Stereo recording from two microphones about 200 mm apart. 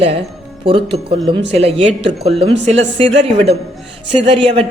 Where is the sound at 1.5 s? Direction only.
30° right (ahead or behind).